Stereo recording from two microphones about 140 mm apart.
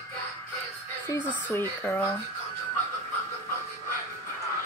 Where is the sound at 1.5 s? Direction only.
15° left (ahead or behind).